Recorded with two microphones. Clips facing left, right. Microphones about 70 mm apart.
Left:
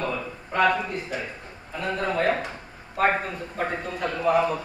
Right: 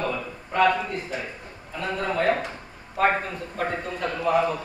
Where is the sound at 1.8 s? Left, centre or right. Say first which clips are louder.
Even; centre.